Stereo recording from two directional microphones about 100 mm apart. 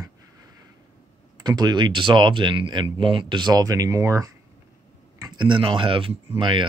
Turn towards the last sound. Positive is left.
turn(degrees=-55)  # may be behind; listen again after turning